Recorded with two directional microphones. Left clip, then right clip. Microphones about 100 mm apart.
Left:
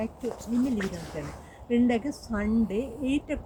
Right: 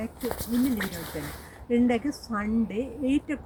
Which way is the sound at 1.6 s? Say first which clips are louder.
Right 1 dB; 45° left (ahead or behind).